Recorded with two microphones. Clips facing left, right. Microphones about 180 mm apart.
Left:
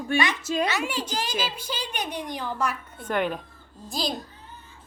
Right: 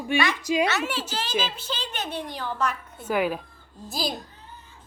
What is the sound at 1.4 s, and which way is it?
A woman's voice, 10° left (ahead or behind).